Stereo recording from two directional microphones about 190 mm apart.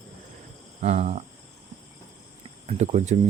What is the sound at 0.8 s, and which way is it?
Cricket, 35° right (ahead or behind).